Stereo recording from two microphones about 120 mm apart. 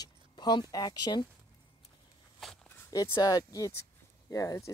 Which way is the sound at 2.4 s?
Centre (ahead or behind).